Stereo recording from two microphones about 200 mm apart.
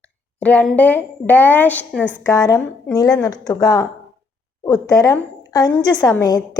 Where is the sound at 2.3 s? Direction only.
20° left (ahead or behind).